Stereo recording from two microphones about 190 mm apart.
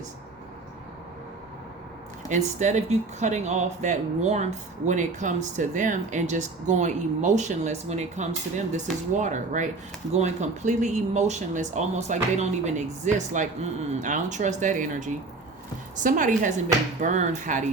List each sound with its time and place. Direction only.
2.3 s a woman's voice: 40° right (ahead or behind)